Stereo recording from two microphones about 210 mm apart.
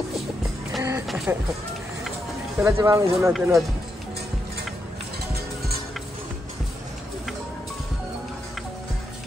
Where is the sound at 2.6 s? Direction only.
10° right (ahead or behind).